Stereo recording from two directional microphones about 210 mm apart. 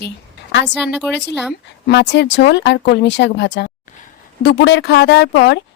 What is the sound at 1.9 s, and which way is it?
Speech, 55° left (ahead or behind).